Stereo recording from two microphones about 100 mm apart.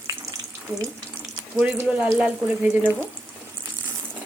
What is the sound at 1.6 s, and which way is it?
Speech, 15° right (ahead or behind).